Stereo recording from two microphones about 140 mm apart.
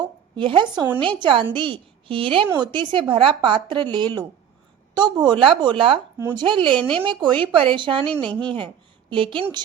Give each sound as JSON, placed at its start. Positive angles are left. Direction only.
{"t": 0.3, "sound": "a woman's voice", "side_deg": -35}
{"t": 6.7, "sound": "a woman's voice", "side_deg": 5}
{"t": 7.1, "sound": "a woman's voice", "side_deg": -35}
{"t": 8.0, "sound": "a woman's voice", "side_deg": 5}
{"t": 8.5, "sound": "a woman's voice", "side_deg": -35}